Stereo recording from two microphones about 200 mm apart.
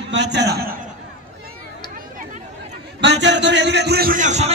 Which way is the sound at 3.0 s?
60° right (ahead or behind).